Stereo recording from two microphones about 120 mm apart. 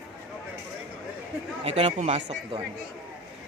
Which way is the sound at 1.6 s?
55° right (ahead or behind).